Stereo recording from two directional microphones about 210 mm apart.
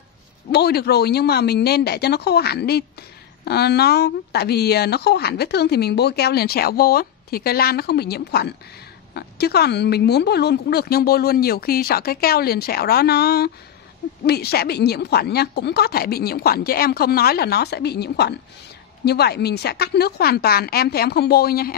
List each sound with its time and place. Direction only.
0.5 s speech: 50° left (ahead or behind)